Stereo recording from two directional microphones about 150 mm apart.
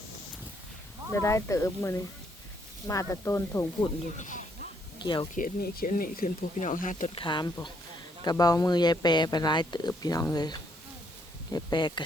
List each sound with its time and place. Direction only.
1.2 s speech: 20° left (ahead or behind)
4.2 s speech: 55° left (ahead or behind)
5.3 s speech: 75° left (ahead or behind); by 7.1 s 60° left (ahead or behind)
7.2 s speech: 30° left (ahead or behind)